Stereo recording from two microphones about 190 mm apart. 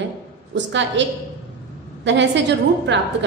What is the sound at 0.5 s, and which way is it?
A woman's voice, 70° right (ahead or behind).